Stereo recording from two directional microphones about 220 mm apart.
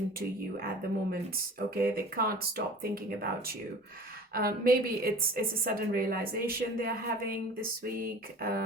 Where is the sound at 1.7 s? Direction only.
40° right (ahead or behind).